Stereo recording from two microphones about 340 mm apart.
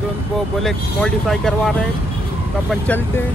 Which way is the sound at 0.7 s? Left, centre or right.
Centre.